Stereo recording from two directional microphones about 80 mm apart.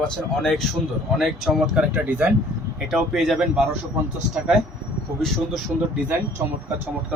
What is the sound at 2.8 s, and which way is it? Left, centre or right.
Speech, centre.